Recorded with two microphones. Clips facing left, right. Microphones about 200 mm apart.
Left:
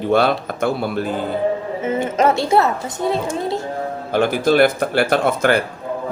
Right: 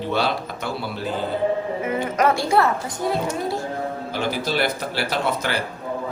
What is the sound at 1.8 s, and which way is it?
Speech, 25° left (ahead or behind).